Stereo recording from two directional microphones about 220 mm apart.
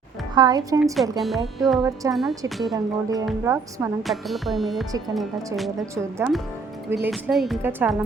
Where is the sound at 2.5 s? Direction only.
Centre (ahead or behind).